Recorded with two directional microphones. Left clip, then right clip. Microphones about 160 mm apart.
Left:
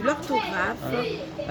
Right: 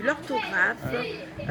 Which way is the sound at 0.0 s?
10° left (ahead or behind).